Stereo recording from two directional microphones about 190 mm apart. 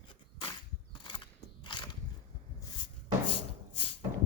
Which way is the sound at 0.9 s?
25° left (ahead or behind).